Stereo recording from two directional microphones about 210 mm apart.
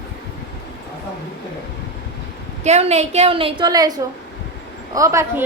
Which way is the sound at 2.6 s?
30° right (ahead or behind).